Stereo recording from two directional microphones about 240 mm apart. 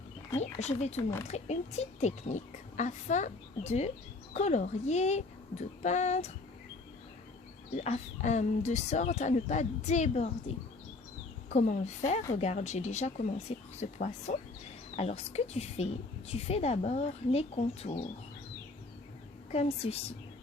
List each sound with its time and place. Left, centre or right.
0.3 s speech: left
7.8 s speech: left
11.4 s speech: left
19.5 s speech: left